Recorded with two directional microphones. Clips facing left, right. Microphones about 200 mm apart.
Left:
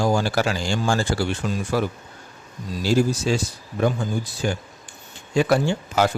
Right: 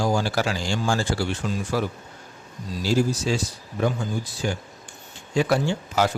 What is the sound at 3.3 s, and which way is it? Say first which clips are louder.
Speech: left 2 dB; 55° left (ahead or behind).